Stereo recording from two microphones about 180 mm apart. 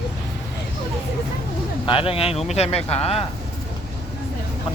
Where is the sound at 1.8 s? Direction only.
30° left (ahead or behind).